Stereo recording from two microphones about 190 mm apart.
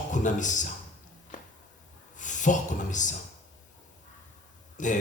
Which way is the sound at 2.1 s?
40° left (ahead or behind).